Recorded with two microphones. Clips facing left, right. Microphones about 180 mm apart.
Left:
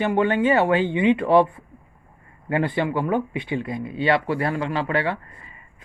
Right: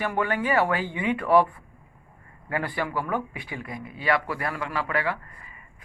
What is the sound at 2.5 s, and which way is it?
Speech, 25° left (ahead or behind).